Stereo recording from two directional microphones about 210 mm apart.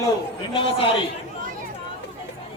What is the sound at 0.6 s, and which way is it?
Speech, 25° left (ahead or behind).